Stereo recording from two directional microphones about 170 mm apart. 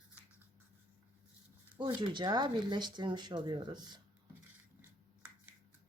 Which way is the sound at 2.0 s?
25° right (ahead or behind).